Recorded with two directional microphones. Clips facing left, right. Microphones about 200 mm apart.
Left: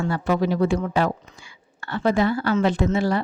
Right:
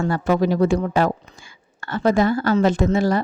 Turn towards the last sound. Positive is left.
turn(degrees=-40)  # may be behind; listen again after turning